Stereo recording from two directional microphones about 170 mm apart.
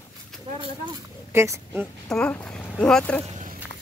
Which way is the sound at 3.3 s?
45° right (ahead or behind).